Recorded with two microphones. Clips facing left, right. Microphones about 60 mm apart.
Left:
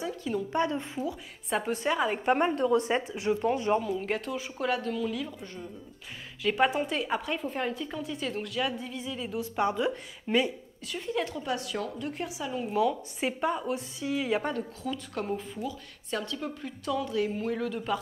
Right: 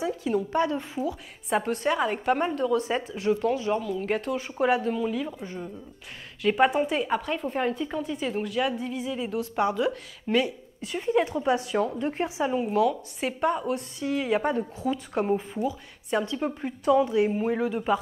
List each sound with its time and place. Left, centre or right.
0.0 s a woman's voice: centre
1.6 s a woman's voice: centre
2.2 s a woman's voice: centre
2.5 s speech: left
3.0 s a woman's voice: centre
4.5 s speech: centre
6.4 s a woman's voice: centre
9.4 s a woman's voice: centre
10.8 s speech: right
12.6 s a woman's voice: centre
14.5 s speech: centre